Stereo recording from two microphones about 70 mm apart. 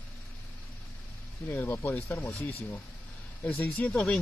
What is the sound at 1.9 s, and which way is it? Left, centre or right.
Speech, left.